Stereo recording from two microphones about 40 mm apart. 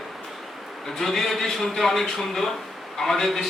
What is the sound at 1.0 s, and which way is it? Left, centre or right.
A man's voice, centre.